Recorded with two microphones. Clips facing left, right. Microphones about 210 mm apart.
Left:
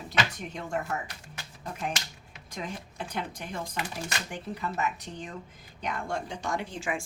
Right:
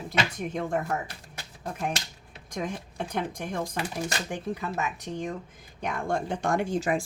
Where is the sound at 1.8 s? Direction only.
40° right (ahead or behind).